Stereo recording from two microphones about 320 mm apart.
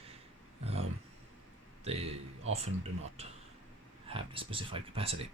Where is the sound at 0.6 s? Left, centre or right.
Centre.